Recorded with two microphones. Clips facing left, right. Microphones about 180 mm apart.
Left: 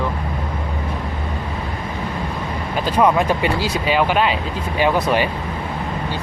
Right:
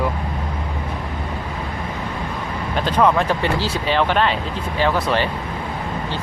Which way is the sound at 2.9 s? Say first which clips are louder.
Left 1 dB; 10° left (ahead or behind).